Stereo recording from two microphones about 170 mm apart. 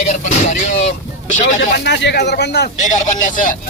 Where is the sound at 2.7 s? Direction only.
45° left (ahead or behind).